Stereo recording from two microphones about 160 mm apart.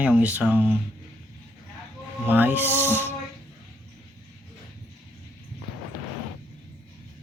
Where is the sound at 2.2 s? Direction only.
10° right (ahead or behind).